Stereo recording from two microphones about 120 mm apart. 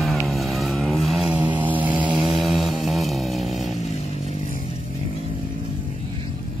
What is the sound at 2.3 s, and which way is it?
Mantra, centre (ahead or behind).